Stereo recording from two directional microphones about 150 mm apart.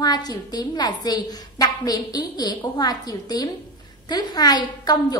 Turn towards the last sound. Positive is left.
turn(degrees=25)  # may be behind; listen again after turning